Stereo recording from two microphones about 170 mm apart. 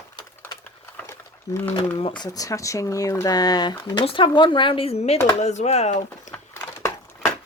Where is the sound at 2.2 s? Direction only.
20° left (ahead or behind); by 6.0 s 40° left (ahead or behind).